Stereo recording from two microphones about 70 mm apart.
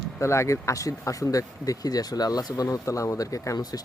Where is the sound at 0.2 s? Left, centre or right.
Left.